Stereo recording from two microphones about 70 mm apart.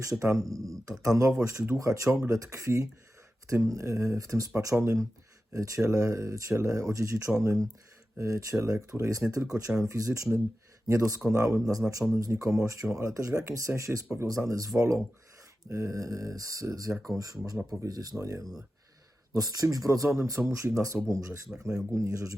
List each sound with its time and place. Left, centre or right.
0.0 s speech: right
15.7 s speech: right
19.3 s speech: right